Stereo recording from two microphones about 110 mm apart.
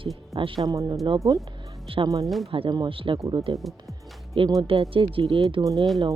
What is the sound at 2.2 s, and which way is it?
Speech, centre (ahead or behind).